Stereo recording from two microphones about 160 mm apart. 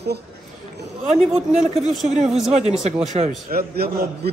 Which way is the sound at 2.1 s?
40° right (ahead or behind).